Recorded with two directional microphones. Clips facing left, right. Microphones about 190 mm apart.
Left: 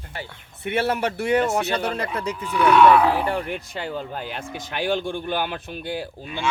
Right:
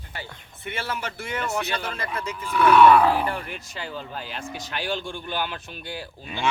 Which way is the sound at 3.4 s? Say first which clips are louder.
Left 6 dB; 55° left (ahead or behind).